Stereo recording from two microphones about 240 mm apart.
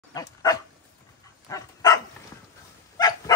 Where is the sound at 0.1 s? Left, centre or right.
Centre.